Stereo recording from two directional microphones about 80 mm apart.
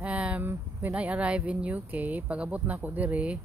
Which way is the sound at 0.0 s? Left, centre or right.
Centre.